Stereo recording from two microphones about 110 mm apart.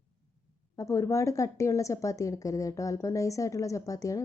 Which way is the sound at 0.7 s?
30° left (ahead or behind).